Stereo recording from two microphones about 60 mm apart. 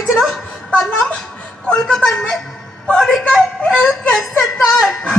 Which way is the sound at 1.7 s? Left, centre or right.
Centre.